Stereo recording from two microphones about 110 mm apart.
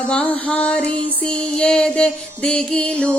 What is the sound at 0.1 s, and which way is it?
Music, 10° left (ahead or behind).